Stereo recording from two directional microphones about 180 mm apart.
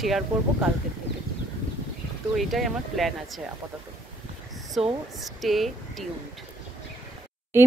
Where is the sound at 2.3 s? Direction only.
Centre (ahead or behind).